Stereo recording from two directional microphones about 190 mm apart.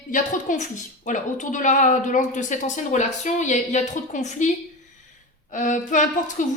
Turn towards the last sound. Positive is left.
turn(degrees=40)  # may be behind; listen again after turning